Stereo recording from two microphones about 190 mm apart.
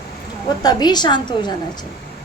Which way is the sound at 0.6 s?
20° left (ahead or behind).